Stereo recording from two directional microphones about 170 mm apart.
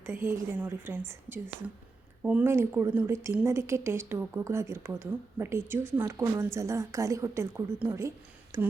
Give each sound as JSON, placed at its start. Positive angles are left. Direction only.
{"t": 0.0, "sound": "a woman's voice", "side_deg": -15}